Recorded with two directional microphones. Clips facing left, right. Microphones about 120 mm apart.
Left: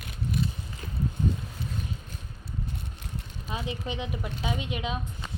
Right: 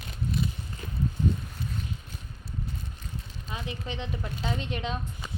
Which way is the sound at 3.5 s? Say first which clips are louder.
Left 3 dB; 15° left (ahead or behind).